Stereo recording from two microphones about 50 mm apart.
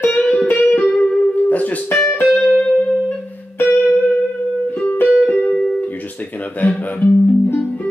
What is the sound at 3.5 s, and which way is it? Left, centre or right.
Music, left.